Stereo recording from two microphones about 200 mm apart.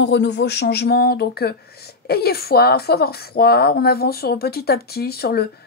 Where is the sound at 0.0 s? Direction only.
60° left (ahead or behind).